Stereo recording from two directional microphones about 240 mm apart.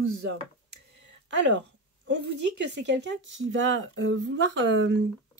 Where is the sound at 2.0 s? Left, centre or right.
Right.